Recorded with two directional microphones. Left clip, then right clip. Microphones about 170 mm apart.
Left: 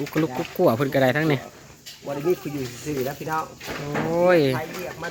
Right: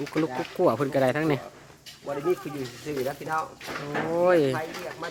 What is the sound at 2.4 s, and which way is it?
Speech, 35° left (ahead or behind).